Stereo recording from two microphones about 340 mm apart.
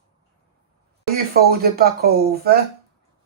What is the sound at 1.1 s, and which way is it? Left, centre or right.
Speech, right.